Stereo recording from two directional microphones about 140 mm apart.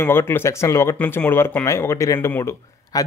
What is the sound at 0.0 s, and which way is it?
Speech, 15° left (ahead or behind).